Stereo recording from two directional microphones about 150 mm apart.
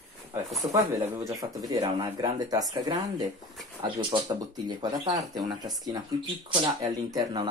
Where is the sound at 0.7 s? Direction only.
20° right (ahead or behind).